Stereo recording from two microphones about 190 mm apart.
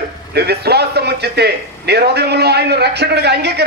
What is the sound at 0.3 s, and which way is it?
A man's voice, 60° right (ahead or behind).